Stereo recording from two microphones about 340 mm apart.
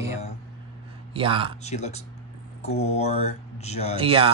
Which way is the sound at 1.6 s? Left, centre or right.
Centre.